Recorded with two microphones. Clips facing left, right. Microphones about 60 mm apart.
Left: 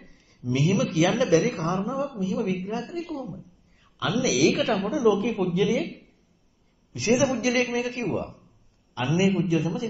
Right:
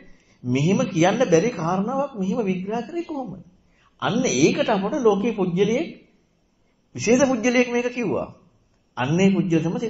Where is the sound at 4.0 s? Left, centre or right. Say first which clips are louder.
Right 3 dB; centre.